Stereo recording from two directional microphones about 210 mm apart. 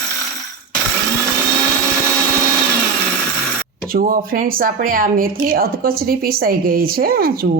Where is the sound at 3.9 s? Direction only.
40° right (ahead or behind).